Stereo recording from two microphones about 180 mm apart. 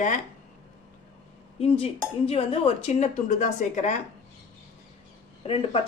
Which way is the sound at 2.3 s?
30° left (ahead or behind).